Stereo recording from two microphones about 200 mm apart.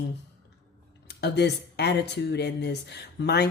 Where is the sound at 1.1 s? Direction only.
55° left (ahead or behind).